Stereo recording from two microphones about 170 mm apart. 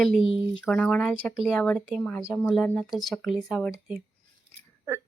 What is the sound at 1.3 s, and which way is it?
Speech, 5° right (ahead or behind).